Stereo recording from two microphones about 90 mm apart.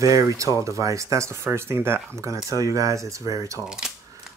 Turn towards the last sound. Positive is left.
turn(degrees=-5)  # may be behind; listen again after turning